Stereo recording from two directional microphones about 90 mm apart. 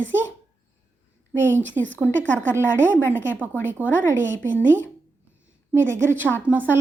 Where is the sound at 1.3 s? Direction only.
25° right (ahead or behind).